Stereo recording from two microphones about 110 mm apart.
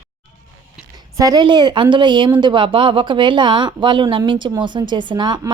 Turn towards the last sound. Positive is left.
turn(degrees=-45)  # may be behind; listen again after turning